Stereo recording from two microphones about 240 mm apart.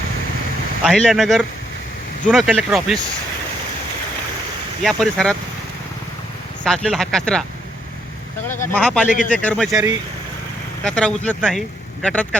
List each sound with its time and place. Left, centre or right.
0.9 s speech: centre
4.8 s speech: centre
6.7 s speech: centre
8.6 s speech: centre
9.0 s speech: left
9.3 s speech: centre
10.8 s speech: centre